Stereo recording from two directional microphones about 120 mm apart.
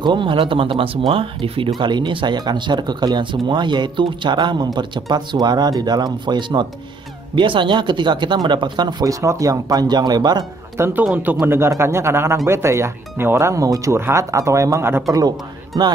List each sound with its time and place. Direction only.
0.0 s speech: 40° right (ahead or behind)
10.8 s speech: 15° right (ahead or behind)
11.1 s speech: 5° right (ahead or behind)
11.4 s speech: 20° right (ahead or behind)
15.1 s speech: 30° right (ahead or behind)